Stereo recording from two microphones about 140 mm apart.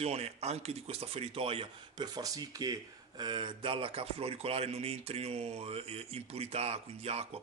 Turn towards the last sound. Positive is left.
turn(degrees=-45)  # may be behind; listen again after turning